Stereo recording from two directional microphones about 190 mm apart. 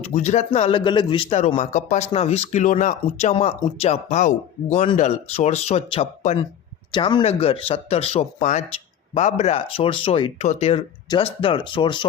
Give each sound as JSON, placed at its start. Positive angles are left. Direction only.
{"t": 0.0, "sound": "speech", "side_deg": 35}